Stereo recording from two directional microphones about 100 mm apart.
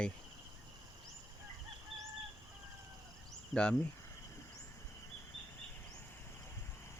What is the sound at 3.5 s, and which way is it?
Speech, 10° left (ahead or behind).